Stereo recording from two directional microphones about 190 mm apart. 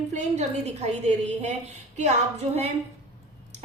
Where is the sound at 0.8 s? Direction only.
35° right (ahead or behind).